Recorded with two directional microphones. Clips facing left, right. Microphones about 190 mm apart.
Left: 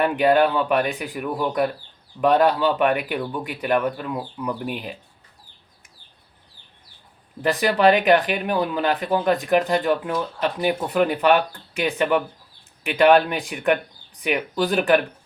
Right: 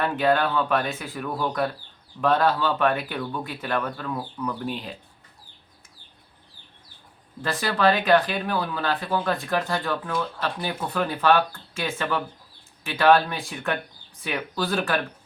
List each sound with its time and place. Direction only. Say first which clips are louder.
0.0 s speech: left 5 dB; 15° left (ahead or behind)
7.4 s speech: left 5 dB; 15° left (ahead or behind)